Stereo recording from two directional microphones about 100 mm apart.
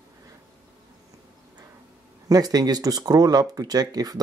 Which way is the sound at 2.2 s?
40° right (ahead or behind).